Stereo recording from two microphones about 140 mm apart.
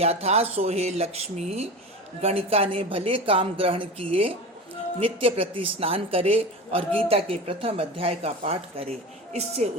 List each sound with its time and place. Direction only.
0.0 s speech: 45° right (ahead or behind)